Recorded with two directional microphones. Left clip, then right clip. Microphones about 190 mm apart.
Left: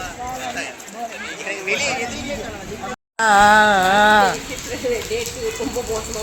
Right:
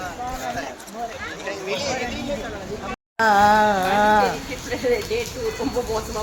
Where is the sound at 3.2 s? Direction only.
5° left (ahead or behind).